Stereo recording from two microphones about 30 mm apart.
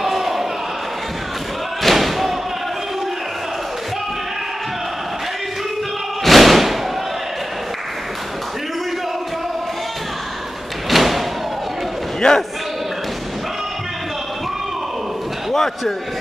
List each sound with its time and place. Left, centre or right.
0.0 s a sound: centre
1.8 s thump: centre
6.2 s thump: centre
10.9 s thump: centre
12.2 s speech: centre